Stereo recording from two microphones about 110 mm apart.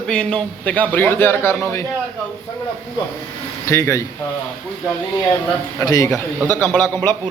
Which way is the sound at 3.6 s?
25° left (ahead or behind).